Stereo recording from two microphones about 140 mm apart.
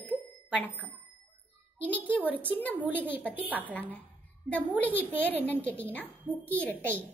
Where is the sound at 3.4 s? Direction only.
10° right (ahead or behind).